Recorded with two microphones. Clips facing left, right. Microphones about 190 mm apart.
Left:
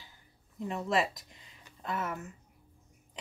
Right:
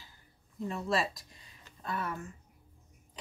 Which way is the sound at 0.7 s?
20° left (ahead or behind).